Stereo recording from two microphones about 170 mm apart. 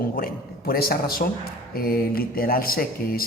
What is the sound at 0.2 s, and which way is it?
A man's voice, 60° left (ahead or behind).